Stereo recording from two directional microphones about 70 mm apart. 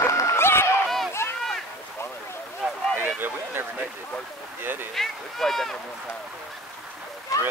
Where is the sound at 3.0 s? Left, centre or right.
Right.